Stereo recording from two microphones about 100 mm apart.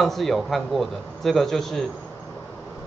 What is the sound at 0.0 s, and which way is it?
A man's voice, centre (ahead or behind).